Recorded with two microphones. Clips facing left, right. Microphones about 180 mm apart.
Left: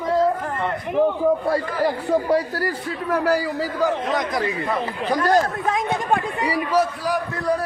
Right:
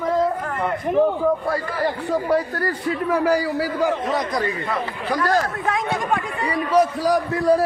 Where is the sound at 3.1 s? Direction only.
10° right (ahead or behind).